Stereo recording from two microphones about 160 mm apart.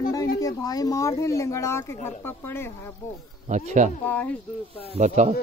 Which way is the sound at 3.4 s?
50° right (ahead or behind).